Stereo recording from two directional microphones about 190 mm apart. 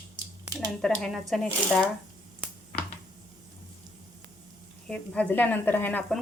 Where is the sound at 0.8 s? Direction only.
5° left (ahead or behind).